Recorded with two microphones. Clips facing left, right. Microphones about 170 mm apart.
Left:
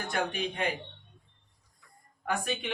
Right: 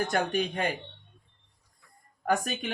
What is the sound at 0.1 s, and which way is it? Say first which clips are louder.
Speech: right 4 dB; 45° right (ahead or behind).